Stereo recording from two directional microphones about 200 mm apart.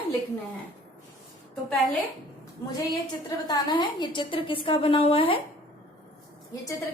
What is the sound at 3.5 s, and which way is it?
A woman's voice, 20° left (ahead or behind).